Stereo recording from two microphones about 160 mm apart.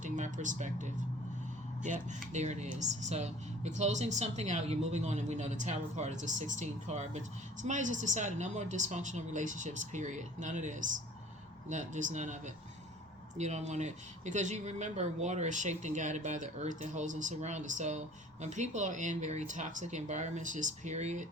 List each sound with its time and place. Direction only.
0.0 s speech: 50° right (ahead or behind)